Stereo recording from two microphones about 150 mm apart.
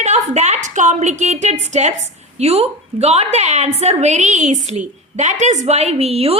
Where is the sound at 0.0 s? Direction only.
50° right (ahead or behind).